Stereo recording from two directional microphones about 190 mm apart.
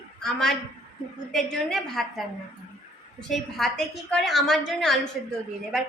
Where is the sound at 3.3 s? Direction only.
Centre (ahead or behind).